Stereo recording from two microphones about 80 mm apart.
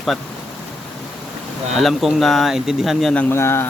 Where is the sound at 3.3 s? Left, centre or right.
Left.